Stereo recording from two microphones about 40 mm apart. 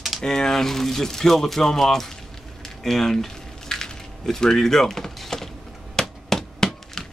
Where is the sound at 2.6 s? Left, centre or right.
Centre.